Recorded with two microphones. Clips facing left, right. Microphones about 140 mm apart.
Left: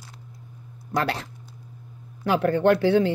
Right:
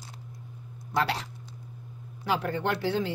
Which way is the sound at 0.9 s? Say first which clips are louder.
Left 2 dB; 50° left (ahead or behind).